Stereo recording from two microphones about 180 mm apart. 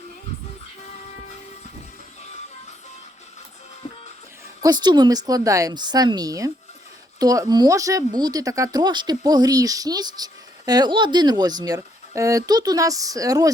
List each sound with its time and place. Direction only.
4.6 s speech: 25° right (ahead or behind)